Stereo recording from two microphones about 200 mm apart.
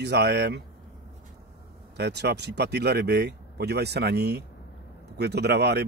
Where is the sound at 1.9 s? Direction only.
55° right (ahead or behind).